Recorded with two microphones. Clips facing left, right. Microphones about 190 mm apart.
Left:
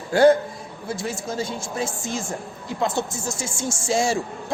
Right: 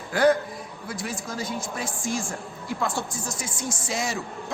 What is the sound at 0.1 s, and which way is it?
A man's voice, 25° left (ahead or behind).